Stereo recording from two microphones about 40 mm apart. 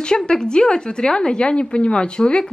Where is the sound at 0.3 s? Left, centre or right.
Centre.